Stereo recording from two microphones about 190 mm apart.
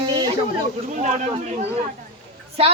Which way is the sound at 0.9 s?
40° right (ahead or behind).